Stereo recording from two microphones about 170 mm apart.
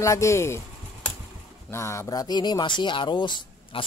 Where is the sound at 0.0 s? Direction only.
15° left (ahead or behind).